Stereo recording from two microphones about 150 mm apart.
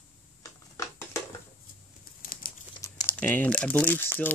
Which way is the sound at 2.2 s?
75° left (ahead or behind).